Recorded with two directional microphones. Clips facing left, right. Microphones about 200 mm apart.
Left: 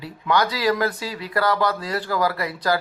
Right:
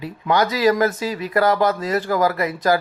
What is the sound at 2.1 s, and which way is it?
Speech, 45° right (ahead or behind).